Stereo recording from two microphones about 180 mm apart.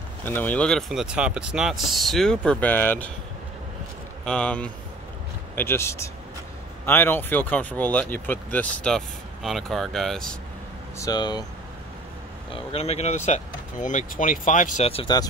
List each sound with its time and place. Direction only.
0.2 s speech: 10° left (ahead or behind)
4.2 s speech: 5° left (ahead or behind)
11.0 s speech: 20° left (ahead or behind)
12.5 s speech: 35° left (ahead or behind)